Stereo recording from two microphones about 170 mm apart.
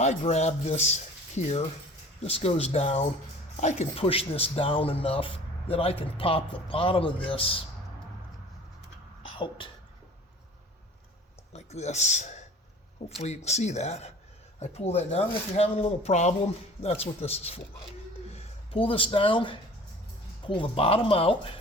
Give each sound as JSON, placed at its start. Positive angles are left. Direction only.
{"t": 0.0, "sound": "speech", "side_deg": 40}
{"t": 9.3, "sound": "speech", "side_deg": 30}
{"t": 11.5, "sound": "speech", "side_deg": 40}